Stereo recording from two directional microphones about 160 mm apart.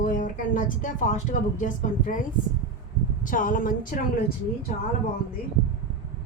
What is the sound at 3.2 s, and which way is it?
Speech, 60° left (ahead or behind).